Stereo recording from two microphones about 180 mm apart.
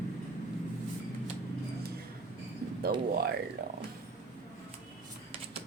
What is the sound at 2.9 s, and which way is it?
Speech, 55° right (ahead or behind).